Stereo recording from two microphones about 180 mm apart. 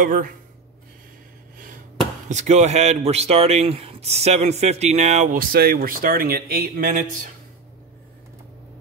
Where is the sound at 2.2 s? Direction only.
40° right (ahead or behind).